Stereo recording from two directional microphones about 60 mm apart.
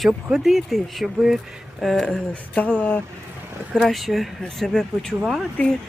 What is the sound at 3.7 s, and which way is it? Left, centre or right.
Speech, centre.